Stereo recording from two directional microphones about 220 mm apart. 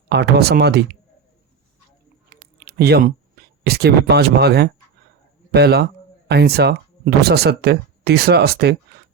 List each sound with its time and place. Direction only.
0.1 s speech: 50° right (ahead or behind)
2.3 s a sound: 45° right (ahead or behind)
3.6 s speech: 45° right (ahead or behind)